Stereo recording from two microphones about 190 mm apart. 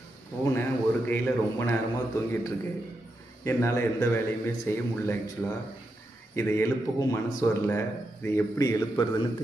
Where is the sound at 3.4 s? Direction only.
15° left (ahead or behind).